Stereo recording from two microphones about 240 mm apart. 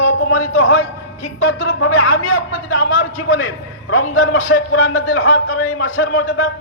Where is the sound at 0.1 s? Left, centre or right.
Left.